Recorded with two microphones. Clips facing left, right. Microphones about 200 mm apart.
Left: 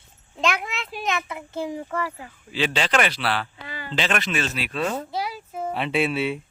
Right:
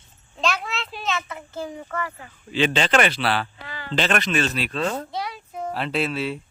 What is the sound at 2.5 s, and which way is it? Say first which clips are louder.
Speech: right 3 dB; 5° left (ahead or behind).